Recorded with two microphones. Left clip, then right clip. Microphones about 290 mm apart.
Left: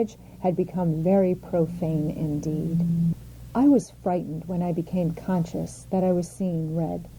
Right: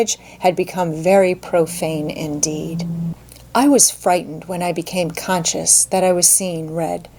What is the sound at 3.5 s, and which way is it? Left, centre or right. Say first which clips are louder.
A woman's voice: right 7 dB; centre.